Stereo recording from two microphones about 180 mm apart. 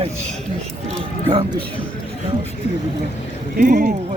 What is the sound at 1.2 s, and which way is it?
Speech, 25° right (ahead or behind).